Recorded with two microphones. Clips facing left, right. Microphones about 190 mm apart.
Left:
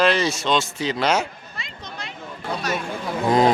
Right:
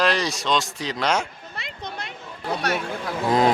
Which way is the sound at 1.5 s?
60° right (ahead or behind).